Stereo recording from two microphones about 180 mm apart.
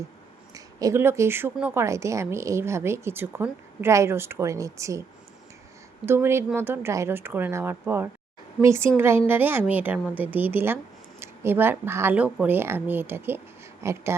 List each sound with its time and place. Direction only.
0.5 s a woman's voice: 20° right (ahead or behind)
6.1 s a woman's voice: 15° right (ahead or behind)